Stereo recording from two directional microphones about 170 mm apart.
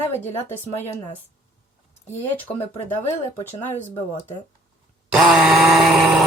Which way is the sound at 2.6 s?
40° left (ahead or behind).